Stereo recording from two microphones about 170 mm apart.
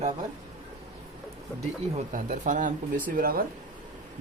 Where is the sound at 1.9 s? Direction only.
50° right (ahead or behind).